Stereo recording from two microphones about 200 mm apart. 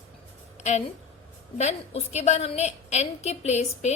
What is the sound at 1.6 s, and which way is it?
A woman's voice, 35° left (ahead or behind).